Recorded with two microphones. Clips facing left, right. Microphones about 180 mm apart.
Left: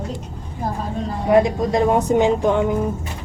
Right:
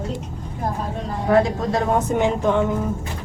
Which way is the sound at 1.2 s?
15° left (ahead or behind).